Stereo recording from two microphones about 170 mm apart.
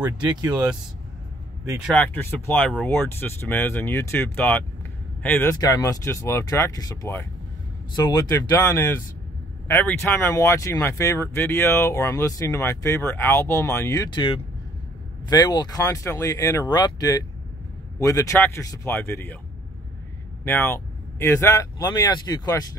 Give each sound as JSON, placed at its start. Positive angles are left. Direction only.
{"t": 0.0, "sound": "speech", "side_deg": -25}
{"t": 2.0, "sound": "speech", "side_deg": 10}
{"t": 8.5, "sound": "speech", "side_deg": 15}
{"t": 20.4, "sound": "speech", "side_deg": 15}